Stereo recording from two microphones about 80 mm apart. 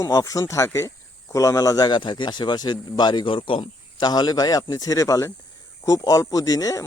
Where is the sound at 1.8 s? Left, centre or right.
Left.